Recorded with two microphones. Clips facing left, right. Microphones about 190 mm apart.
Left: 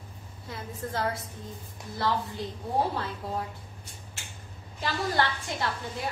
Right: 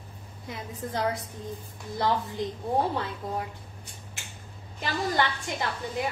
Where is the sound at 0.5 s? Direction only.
15° right (ahead or behind).